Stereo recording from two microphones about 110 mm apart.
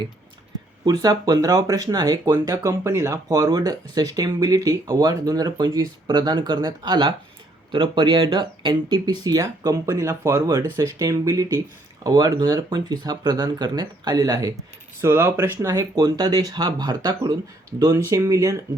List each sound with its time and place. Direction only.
0.9 s speech: 35° right (ahead or behind)
15.0 s speech: 20° right (ahead or behind)